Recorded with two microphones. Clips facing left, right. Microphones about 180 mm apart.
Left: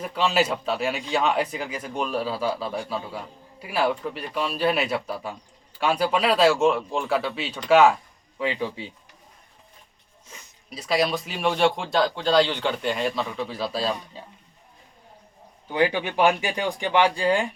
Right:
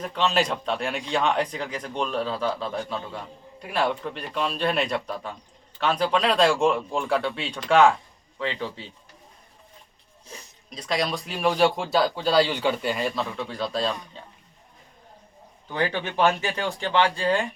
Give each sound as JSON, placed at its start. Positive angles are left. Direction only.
{"t": 0.0, "sound": "a man's voice", "side_deg": 10}
{"t": 10.3, "sound": "a sound", "side_deg": -35}
{"t": 10.7, "sound": "speech", "side_deg": 5}
{"t": 15.7, "sound": "a man's voice", "side_deg": 10}